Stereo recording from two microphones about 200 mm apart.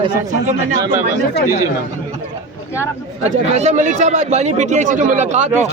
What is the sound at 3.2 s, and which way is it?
A man's voice, 35° right (ahead or behind).